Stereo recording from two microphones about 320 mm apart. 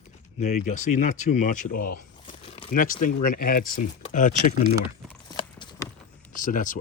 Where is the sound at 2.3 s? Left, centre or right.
Centre.